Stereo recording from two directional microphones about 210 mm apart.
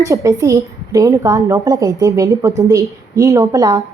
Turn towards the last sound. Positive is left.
turn(degrees=-15)  # may be behind; listen again after turning